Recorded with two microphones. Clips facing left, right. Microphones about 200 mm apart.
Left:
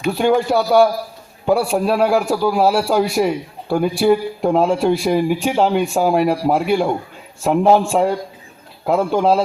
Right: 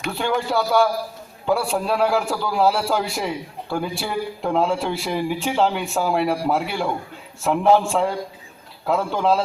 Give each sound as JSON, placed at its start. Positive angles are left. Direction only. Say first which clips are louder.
{"t": 0.4, "sound": "a man's voice", "louder": "left 5 dB", "side_deg": 15}